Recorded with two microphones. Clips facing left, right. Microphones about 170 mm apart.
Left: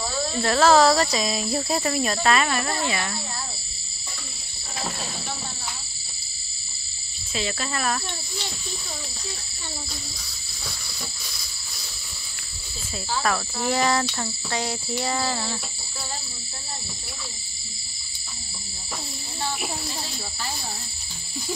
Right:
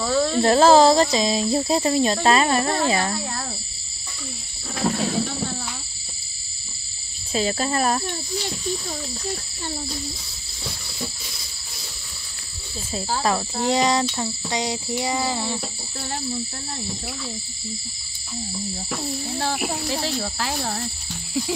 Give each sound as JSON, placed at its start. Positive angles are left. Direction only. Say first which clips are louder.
{"t": 0.0, "sound": "a sound", "louder": "right 8 dB", "side_deg": -80}
{"t": 0.4, "sound": "speech", "louder": "right 3 dB", "side_deg": -30}
{"t": 7.3, "sound": "speech", "louder": "right 7 dB", "side_deg": -35}
{"t": 13.2, "sound": "speech", "louder": "right 2 dB", "side_deg": -20}
{"t": 19.4, "sound": "speech", "louder": "right 3 dB", "side_deg": -70}